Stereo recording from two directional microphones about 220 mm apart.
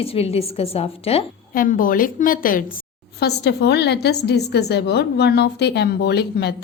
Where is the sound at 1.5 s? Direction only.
40° left (ahead or behind).